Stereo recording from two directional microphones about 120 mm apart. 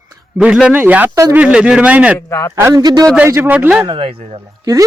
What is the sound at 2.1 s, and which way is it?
Speech, 20° left (ahead or behind).